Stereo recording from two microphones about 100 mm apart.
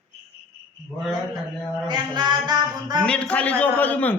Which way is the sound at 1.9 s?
45° right (ahead or behind).